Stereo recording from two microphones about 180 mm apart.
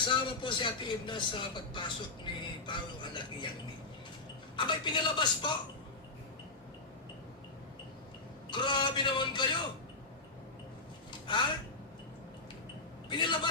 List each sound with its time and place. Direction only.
0.2 s speech: 25° left (ahead or behind)
4.5 s speech: 25° left (ahead or behind)
8.4 s speech: 25° left (ahead or behind)
11.3 s speech: 25° left (ahead or behind)
13.1 s a man's voice: 25° left (ahead or behind)